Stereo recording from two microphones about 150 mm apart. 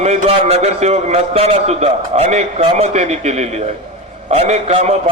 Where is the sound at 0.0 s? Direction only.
45° right (ahead or behind).